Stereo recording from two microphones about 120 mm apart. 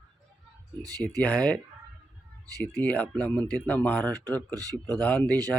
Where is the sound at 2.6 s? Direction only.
10° left (ahead or behind).